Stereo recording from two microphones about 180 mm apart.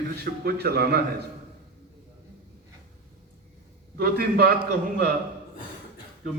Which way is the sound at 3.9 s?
60° right (ahead or behind).